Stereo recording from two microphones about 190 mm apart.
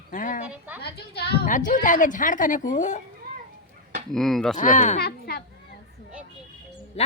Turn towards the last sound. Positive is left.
turn(degrees=35)  # may be behind; listen again after turning